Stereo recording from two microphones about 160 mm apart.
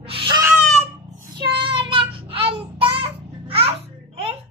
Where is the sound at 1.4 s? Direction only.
35° right (ahead or behind).